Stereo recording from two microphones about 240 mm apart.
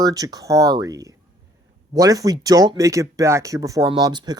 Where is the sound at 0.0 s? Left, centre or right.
Centre.